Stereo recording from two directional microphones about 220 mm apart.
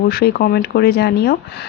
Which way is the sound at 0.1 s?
45° left (ahead or behind).